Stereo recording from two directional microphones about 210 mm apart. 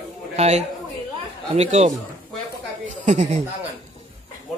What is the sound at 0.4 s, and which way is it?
Speech, 30° right (ahead or behind).